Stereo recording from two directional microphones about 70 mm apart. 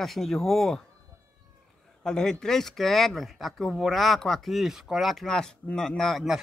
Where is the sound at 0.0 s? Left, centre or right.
Centre.